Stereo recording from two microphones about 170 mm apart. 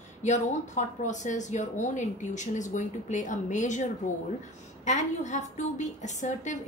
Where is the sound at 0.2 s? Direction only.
45° left (ahead or behind).